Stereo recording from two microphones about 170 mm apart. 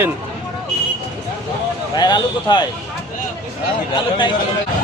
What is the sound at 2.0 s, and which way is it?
Speech, 25° left (ahead or behind).